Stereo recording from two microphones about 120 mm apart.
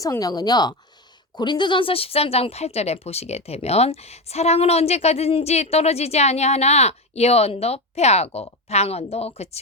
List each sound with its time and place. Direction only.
0.0 s speech: 30° left (ahead or behind); by 9.6 s 60° left (ahead or behind)